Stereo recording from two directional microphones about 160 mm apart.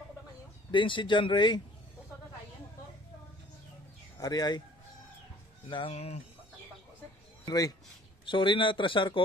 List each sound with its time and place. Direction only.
0.7 s speech: 30° left (ahead or behind)
4.2 s speech: 25° left (ahead or behind)
5.7 s speech: 35° left (ahead or behind)
7.4 s speech: 25° left (ahead or behind)